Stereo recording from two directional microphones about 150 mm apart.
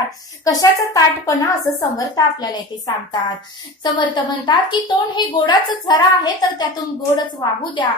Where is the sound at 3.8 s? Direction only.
30° left (ahead or behind).